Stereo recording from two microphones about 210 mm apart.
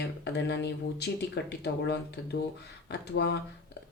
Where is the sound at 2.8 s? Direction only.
55° left (ahead or behind).